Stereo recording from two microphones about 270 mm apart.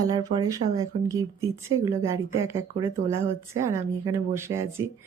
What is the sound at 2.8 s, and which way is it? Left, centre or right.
Speech, centre.